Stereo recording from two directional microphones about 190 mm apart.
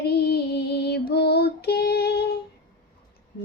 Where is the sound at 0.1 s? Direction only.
60° left (ahead or behind).